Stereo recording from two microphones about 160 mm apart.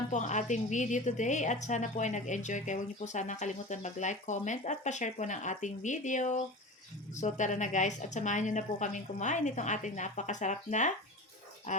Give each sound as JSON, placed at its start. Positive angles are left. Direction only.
{"t": 0.1, "sound": "a woman's voice", "side_deg": 50}